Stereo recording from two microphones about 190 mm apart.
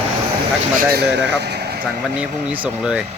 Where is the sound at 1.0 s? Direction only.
60° right (ahead or behind).